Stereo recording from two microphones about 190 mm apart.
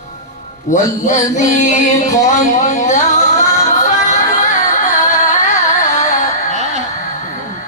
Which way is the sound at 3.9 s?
40° left (ahead or behind).